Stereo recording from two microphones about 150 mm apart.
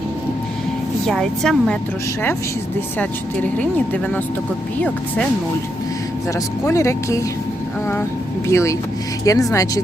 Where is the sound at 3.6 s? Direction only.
10° left (ahead or behind).